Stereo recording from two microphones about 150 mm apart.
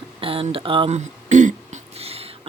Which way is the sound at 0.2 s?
35° right (ahead or behind).